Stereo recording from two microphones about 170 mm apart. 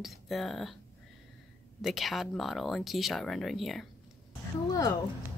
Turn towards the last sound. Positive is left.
turn(degrees=20)  # may be behind; listen again after turning